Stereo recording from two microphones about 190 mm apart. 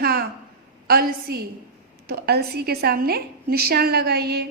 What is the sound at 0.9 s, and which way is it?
A woman's voice, 50° right (ahead or behind).